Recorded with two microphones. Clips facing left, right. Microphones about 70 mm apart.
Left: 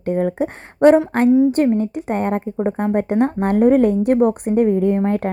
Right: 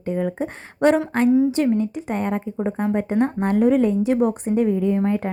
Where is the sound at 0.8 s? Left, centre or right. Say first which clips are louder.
Left 5 dB; left.